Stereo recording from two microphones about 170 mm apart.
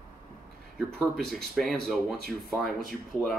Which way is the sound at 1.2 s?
Centre (ahead or behind).